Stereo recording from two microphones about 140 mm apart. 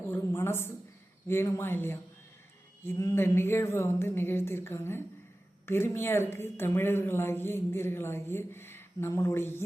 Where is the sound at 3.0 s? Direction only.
20° left (ahead or behind).